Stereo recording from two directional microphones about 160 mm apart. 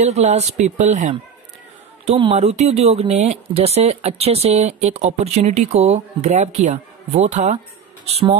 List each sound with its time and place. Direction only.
0.0 s speech: 45° right (ahead or behind)
2.0 s speech: 35° right (ahead or behind)